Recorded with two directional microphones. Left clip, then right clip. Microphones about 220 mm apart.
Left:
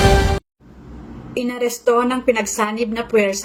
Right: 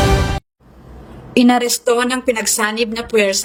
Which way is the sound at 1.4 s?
50° right (ahead or behind).